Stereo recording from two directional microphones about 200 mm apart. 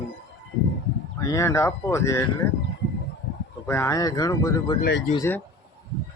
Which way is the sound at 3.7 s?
15° left (ahead or behind).